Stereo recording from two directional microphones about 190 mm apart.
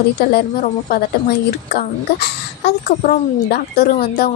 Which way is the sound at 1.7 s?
55° left (ahead or behind).